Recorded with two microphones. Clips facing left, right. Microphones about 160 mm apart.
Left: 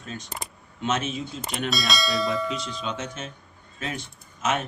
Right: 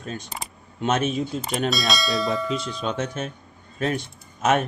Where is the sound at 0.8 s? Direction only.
50° right (ahead or behind).